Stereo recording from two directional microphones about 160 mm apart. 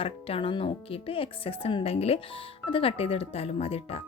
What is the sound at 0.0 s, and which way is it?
A woman's voice, 35° left (ahead or behind).